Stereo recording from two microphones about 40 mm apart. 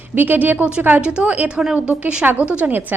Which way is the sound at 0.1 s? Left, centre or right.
Right.